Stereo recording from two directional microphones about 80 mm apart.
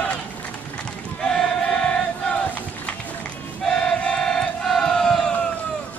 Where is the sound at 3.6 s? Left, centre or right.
Centre.